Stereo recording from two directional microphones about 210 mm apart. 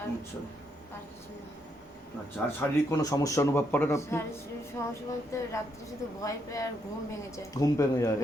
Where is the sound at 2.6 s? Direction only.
15° left (ahead or behind).